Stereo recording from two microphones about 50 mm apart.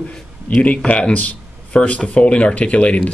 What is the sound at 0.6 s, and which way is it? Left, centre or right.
Speech, left.